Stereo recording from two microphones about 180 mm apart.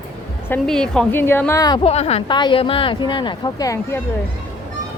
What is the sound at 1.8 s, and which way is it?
Speech, 35° left (ahead or behind).